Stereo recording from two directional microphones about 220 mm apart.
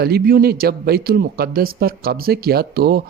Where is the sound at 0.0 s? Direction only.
45° right (ahead or behind).